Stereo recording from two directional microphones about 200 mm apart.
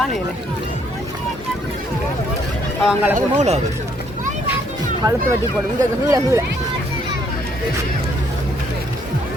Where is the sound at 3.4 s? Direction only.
35° right (ahead or behind).